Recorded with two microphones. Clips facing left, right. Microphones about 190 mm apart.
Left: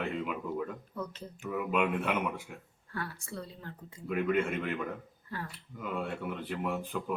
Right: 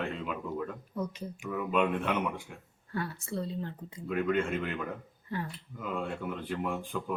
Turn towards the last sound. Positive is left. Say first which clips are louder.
# even
turn(degrees=0)  # may be behind; listen again after turning